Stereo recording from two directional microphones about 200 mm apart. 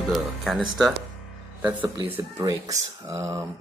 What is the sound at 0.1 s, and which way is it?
Speech, centre (ahead or behind).